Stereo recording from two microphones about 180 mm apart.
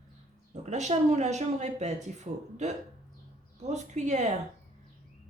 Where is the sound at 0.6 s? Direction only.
40° right (ahead or behind).